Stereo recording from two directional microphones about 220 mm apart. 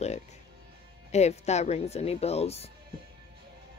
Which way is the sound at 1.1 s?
30° left (ahead or behind).